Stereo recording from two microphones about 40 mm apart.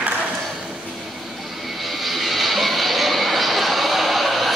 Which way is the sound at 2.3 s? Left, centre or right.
Centre.